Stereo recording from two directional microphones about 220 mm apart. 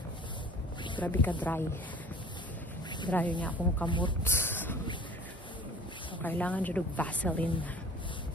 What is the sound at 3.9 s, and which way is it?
Speech, 20° left (ahead or behind).